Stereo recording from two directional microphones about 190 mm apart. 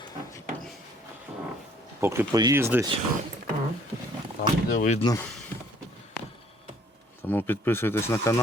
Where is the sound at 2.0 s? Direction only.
15° right (ahead or behind).